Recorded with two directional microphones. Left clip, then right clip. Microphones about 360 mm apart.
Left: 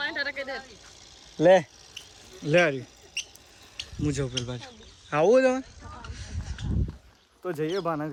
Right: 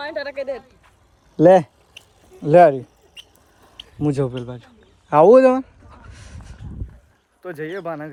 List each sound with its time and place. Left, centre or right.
0.1 s speech: left
1.5 s a sound: centre
2.5 s speech: centre
4.0 s speech: centre
6.1 s a sound: centre
7.4 s speech: centre